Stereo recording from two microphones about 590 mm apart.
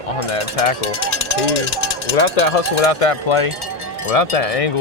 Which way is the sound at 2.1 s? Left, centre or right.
Left.